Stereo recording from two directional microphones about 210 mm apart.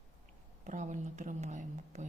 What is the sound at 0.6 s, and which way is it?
A woman's voice, 35° right (ahead or behind).